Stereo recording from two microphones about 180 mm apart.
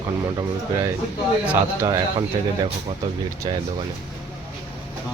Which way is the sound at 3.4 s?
25° right (ahead or behind).